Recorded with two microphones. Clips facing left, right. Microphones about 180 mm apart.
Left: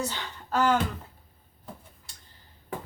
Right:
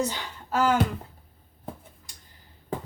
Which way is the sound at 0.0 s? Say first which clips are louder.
Right 4 dB; 10° right (ahead or behind).